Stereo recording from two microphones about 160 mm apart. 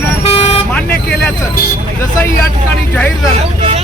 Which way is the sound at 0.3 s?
40° left (ahead or behind).